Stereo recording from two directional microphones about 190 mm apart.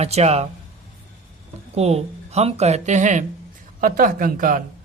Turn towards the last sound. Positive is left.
turn(degrees=-45)  # may be behind; listen again after turning